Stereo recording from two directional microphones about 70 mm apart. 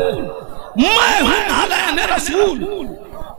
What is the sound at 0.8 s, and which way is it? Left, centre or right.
Snicker, right.